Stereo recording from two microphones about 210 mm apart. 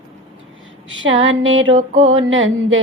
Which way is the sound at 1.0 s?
65° right (ahead or behind).